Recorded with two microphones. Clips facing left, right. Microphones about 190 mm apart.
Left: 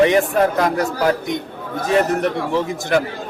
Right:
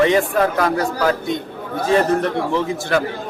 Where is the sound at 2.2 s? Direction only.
15° left (ahead or behind).